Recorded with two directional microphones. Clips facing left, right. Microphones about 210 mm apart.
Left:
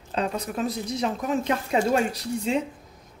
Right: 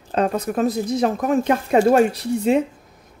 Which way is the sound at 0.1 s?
50° right (ahead or behind).